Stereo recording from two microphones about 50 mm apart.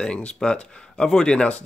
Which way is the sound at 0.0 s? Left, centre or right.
Left.